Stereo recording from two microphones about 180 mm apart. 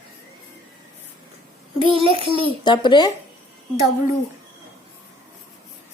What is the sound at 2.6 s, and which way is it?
Speech, 25° left (ahead or behind).